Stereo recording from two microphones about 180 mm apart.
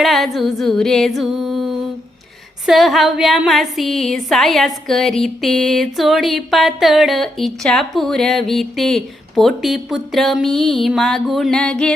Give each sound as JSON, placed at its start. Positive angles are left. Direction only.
{"t": 0.0, "sound": "a woman's voice", "side_deg": 0}